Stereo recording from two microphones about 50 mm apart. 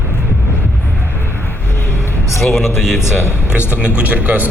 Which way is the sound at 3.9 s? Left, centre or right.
Right.